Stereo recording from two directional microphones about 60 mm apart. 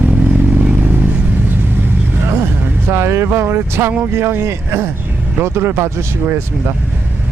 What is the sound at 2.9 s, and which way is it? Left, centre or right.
Speech, right.